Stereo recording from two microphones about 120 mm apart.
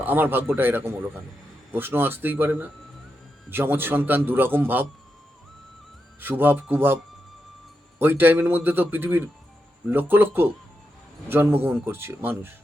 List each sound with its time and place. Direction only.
0.0 s speech: 15° right (ahead or behind)
6.1 s speech: 15° right (ahead or behind)